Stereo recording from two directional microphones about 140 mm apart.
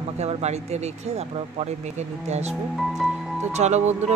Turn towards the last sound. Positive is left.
turn(degrees=-55)  # may be behind; listen again after turning